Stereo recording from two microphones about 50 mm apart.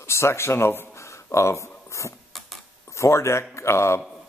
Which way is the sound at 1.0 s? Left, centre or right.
Left.